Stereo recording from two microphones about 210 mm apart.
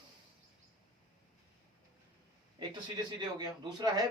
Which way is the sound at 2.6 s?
20° right (ahead or behind).